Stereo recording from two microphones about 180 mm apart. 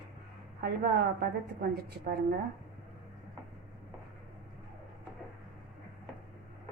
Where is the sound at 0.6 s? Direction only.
60° right (ahead or behind).